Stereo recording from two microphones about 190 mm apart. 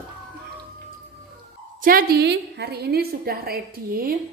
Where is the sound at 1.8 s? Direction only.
50° right (ahead or behind).